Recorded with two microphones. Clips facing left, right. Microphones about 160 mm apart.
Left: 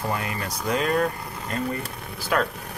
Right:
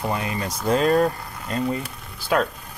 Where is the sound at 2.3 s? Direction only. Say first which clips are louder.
Right 3 dB; 20° right (ahead or behind).